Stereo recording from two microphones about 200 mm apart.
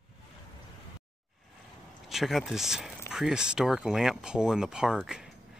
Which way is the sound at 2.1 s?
Centre (ahead or behind).